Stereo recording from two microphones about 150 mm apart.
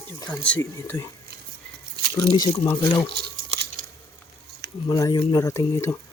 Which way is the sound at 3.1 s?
90° right.